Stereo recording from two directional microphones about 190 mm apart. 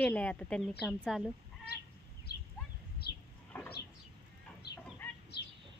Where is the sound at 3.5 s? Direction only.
10° left (ahead or behind).